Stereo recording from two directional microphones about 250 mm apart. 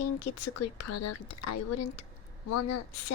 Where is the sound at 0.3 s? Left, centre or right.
Left.